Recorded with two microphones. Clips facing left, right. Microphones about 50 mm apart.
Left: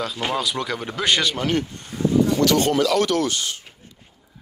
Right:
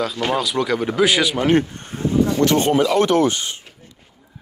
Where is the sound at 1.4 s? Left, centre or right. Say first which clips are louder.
Right 6 dB; right.